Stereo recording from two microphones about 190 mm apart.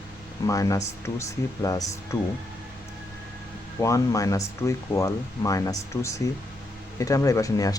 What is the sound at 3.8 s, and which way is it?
Speech, 15° left (ahead or behind).